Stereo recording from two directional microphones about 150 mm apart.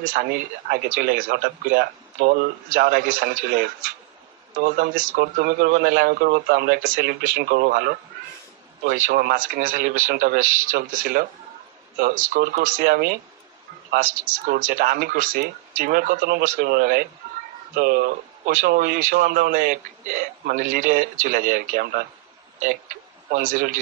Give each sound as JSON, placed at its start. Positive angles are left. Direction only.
{"t": 0.0, "sound": "speech", "side_deg": -80}
{"t": 4.6, "sound": "speech", "side_deg": -65}
{"t": 8.8, "sound": "speech", "side_deg": -60}
{"t": 13.9, "sound": "speech", "side_deg": -65}
{"t": 23.3, "sound": "speech", "side_deg": -65}